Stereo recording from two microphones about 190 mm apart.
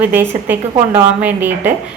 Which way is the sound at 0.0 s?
10° right (ahead or behind).